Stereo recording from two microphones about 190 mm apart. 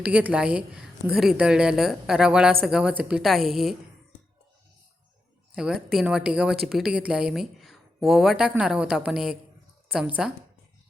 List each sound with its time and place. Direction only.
0.0 s speech: 10° right (ahead or behind)
5.5 s speech: 5° right (ahead or behind)